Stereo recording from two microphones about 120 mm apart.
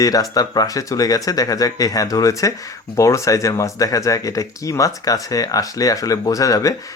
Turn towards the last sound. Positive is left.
turn(degrees=30)  # may be behind; listen again after turning